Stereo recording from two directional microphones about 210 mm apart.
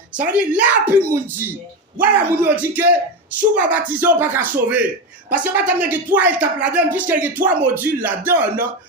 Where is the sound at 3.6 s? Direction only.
5° right (ahead or behind).